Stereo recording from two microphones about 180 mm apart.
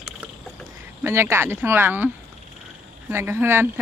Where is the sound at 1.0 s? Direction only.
15° right (ahead or behind).